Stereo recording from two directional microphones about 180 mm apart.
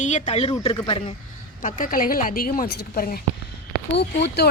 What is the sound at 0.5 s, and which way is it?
Speech, 25° left (ahead or behind).